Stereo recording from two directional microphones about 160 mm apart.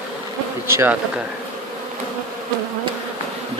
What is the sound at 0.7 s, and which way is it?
Speech, 10° right (ahead or behind).